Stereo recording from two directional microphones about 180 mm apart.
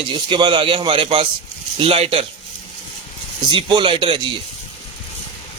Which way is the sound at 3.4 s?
25° right (ahead or behind).